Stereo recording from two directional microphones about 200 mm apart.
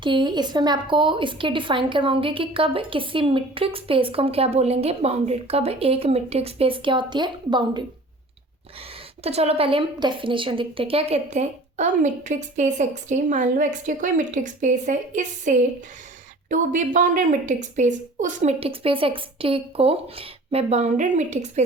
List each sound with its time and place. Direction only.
0.0 s a woman's voice: 25° right (ahead or behind)
9.2 s a woman's voice: 30° right (ahead or behind)